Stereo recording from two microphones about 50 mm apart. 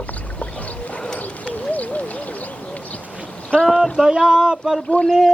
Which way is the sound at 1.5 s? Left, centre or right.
Left.